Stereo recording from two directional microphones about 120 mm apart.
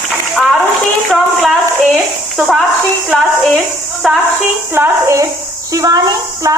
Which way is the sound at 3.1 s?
Centre (ahead or behind).